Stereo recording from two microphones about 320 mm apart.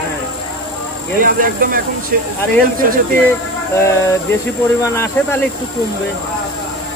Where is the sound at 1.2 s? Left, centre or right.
Right.